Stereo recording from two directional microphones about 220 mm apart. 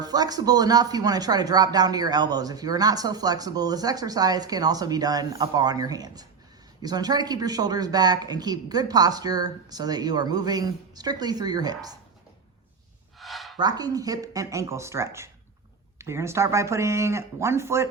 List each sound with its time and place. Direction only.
0.0 s speech: 15° right (ahead or behind)
13.1 s a sound: centre (ahead or behind)
13.6 s speech: 20° right (ahead or behind)